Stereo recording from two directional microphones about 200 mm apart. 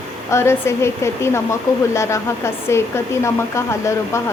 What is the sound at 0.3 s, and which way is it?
Speech, 15° left (ahead or behind).